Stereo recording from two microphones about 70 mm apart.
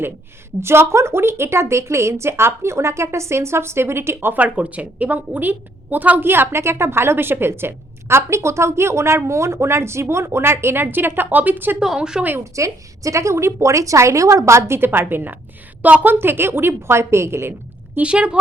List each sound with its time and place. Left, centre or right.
0.6 s a woman's voice: right
4.4 s a woman's voice: right
11.8 s a woman's voice: centre
12.5 s a woman's voice: right
17.9 s a woman's voice: centre